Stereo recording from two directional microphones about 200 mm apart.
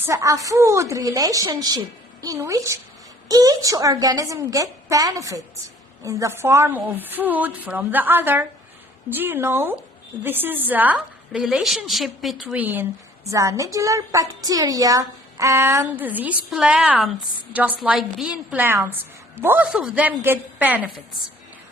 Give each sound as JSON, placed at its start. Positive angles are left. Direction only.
{"t": 0.0, "sound": "a woman's voice", "side_deg": -15}